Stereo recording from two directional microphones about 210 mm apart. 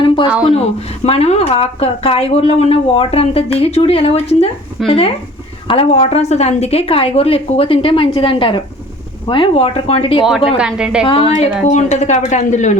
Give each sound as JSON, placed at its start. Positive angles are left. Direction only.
{"t": 0.5, "sound": "a woman's voice", "side_deg": 30}
{"t": 10.2, "sound": "a woman's voice", "side_deg": 0}
{"t": 11.3, "sound": "speech", "side_deg": 35}